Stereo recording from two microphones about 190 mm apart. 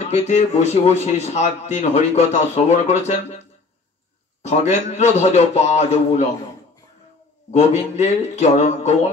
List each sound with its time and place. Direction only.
0.1 s a man's voice: 35° left (ahead or behind)
7.5 s a man's voice: 35° left (ahead or behind)